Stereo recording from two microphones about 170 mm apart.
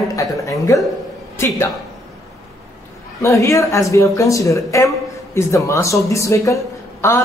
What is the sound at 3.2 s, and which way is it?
Speech, 20° left (ahead or behind).